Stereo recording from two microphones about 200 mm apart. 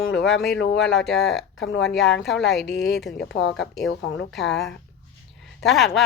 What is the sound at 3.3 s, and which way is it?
Speech, 60° left (ahead or behind).